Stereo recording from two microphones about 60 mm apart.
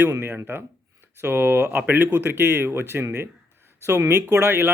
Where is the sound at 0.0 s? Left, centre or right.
Right.